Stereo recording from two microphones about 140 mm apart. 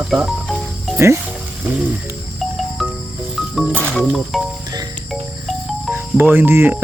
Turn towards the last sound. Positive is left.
turn(degrees=-15)  # may be behind; listen again after turning